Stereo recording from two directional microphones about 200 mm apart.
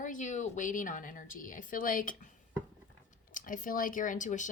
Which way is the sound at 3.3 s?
40° left (ahead or behind).